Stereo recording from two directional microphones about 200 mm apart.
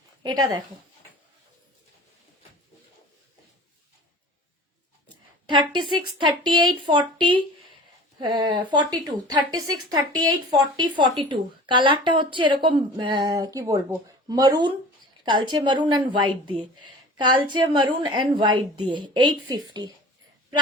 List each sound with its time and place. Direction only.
0.2 s speech: 20° right (ahead or behind)
5.5 s speech: 25° right (ahead or behind)